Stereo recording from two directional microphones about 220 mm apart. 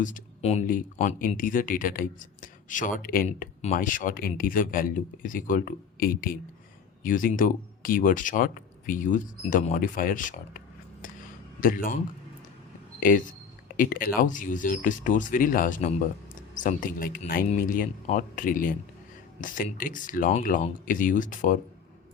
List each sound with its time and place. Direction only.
0.0 s speech: 30° left (ahead or behind)
11.6 s speech: 40° left (ahead or behind)
13.0 s speech: 40° left (ahead or behind)